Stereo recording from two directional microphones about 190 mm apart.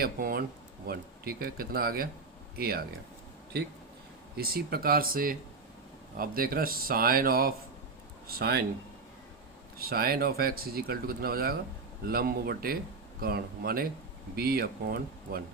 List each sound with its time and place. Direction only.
0.0 s speech: 50° right (ahead or behind)
4.4 s speech: 55° right (ahead or behind)
9.7 s speech: 55° right (ahead or behind)